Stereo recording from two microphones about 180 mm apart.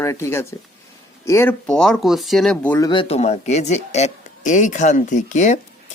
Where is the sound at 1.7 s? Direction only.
Centre (ahead or behind).